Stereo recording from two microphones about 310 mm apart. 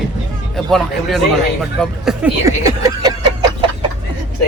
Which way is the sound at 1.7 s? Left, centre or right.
Centre.